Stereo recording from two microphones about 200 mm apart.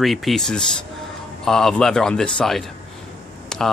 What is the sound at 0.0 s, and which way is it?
Speech, centre (ahead or behind).